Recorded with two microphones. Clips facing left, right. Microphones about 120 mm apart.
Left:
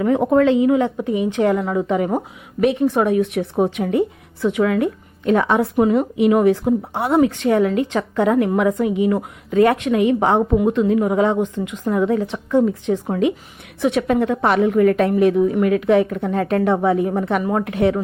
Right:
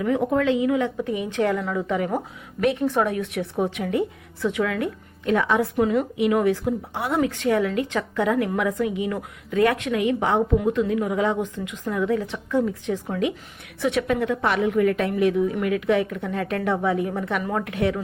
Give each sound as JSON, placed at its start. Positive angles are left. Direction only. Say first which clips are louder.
{"t": 0.3, "sound": "a woman's voice", "louder": "left 8 dB", "side_deg": 35}
{"t": 10.6, "sound": "a woman's voice", "louder": "left 6 dB", "side_deg": 25}
{"t": 14.7, "sound": "a woman's voice", "louder": "left 6 dB", "side_deg": 45}